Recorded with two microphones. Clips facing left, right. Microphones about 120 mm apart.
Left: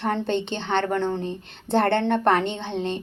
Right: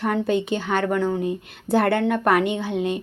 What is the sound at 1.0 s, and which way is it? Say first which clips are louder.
Speech: right 3 dB; 10° right (ahead or behind).